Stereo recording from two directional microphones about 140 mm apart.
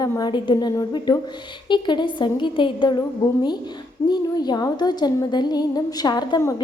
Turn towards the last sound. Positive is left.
turn(degrees=30)  # may be behind; listen again after turning